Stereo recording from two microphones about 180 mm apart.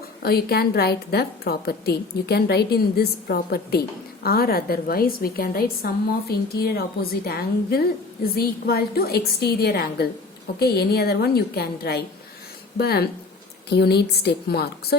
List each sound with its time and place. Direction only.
0.2 s a woman's voice: 60° left (ahead or behind)